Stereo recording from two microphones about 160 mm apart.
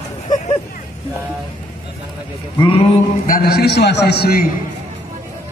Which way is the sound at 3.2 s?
65° left (ahead or behind).